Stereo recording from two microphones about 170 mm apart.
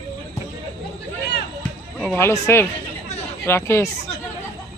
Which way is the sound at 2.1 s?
15° left (ahead or behind).